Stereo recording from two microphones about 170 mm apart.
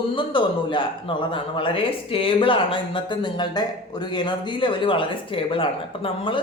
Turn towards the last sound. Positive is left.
turn(degrees=30)  # may be behind; listen again after turning